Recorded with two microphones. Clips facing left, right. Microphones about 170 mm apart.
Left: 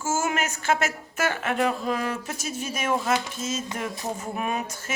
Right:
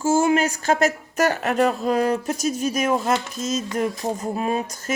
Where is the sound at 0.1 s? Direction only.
30° right (ahead or behind).